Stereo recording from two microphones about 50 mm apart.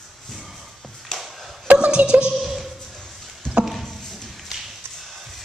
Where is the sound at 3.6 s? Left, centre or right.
Centre.